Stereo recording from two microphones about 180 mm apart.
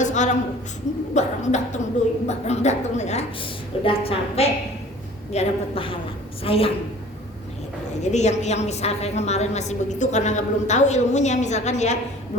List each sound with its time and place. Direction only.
0.0 s a sound: 40° left (ahead or behind)
1.1 s a woman's voice: 40° left (ahead or behind)
8.0 s a woman's voice: 40° left (ahead or behind)